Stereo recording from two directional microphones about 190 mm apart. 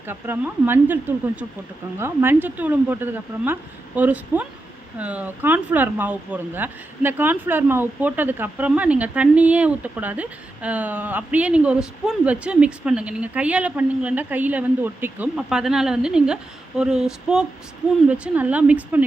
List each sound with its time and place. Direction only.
0.1 s speech: 10° right (ahead or behind)
2.0 s speech: 10° right (ahead or behind)